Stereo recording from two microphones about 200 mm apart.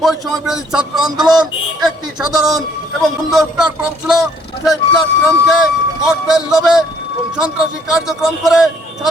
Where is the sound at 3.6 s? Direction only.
Centre (ahead or behind).